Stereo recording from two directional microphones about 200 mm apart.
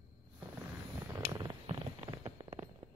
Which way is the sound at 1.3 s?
20° right (ahead or behind).